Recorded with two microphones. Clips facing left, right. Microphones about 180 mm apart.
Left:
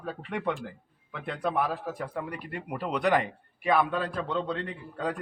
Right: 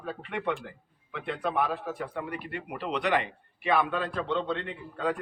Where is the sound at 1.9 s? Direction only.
40° left (ahead or behind).